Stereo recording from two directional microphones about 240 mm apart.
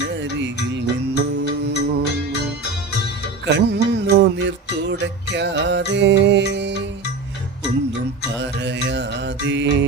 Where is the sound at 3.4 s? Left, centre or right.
Right.